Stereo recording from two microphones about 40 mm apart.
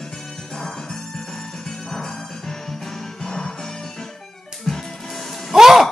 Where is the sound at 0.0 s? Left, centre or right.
Centre.